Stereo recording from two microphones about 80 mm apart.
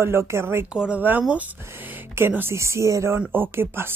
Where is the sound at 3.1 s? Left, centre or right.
Right.